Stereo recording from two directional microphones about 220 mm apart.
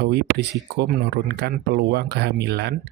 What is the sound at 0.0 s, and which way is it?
Speech, 50° right (ahead or behind).